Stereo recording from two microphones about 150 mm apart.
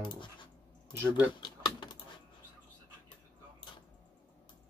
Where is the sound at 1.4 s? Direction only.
30° left (ahead or behind).